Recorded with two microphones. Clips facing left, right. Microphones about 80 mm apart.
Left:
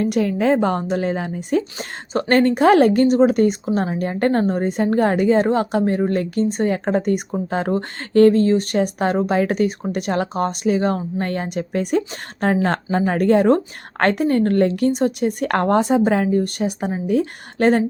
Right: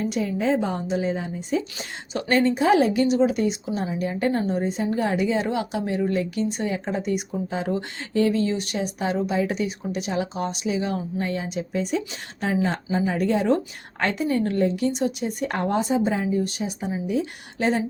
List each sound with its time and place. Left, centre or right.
0.0 s a woman's voice: left
2.4 s a woman's voice: left